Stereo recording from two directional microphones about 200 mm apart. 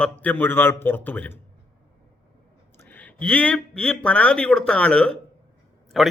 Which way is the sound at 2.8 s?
10° left (ahead or behind).